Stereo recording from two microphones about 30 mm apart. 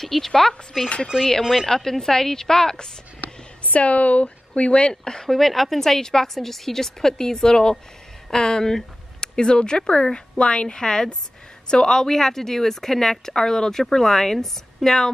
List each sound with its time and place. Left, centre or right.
0.0 s speech: centre
0.8 s speech: left
1.8 s speech: centre
3.7 s speech: left
5.0 s a woman's voice: left
5.3 s a woman's voice: centre